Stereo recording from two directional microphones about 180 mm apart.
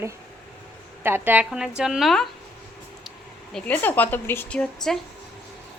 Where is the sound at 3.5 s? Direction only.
10° left (ahead or behind).